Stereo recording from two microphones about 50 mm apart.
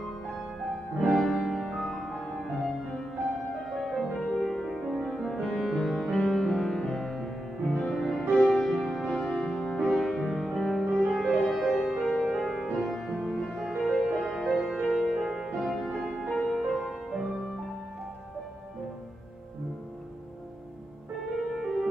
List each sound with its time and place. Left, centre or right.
1.0 s music: centre
7.9 s music: centre
9.8 s music: centre
11.1 s music: centre
15.6 s music: centre
21.4 s music: centre